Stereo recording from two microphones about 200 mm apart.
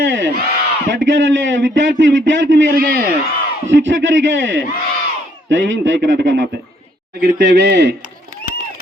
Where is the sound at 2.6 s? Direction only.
45° right (ahead or behind).